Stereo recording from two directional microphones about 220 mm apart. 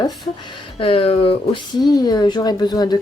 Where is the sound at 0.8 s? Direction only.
25° left (ahead or behind).